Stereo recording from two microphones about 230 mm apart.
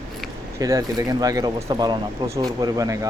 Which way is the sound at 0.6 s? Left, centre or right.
Centre.